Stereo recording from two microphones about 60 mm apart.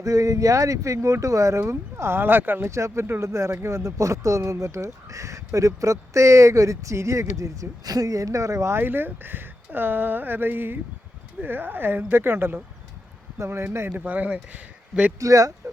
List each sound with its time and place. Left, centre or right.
0.0 s speech: right
2.6 s speech: right
8.7 s speech: right
13.4 s a man's voice: right
13.9 s speech: right
15.2 s speech: right